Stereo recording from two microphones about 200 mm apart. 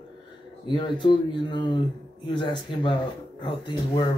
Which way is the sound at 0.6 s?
25° left (ahead or behind).